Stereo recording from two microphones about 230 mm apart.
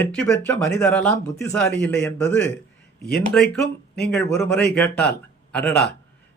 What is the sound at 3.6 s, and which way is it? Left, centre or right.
Speech, left.